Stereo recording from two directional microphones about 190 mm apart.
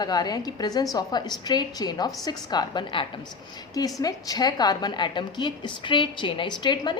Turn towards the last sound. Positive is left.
turn(degrees=25)  # may be behind; listen again after turning